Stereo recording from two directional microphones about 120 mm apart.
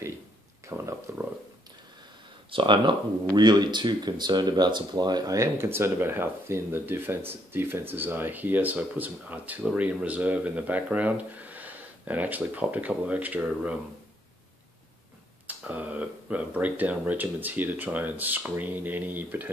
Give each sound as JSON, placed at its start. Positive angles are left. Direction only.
{"t": 0.7, "sound": "speech", "side_deg": -25}
{"t": 2.5, "sound": "speech", "side_deg": -40}
{"t": 15.4, "sound": "speech", "side_deg": -15}